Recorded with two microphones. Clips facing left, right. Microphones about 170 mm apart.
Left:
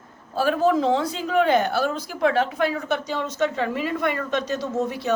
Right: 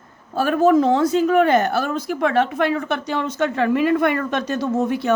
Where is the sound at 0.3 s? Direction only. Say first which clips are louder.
Right 4 dB; 50° right (ahead or behind).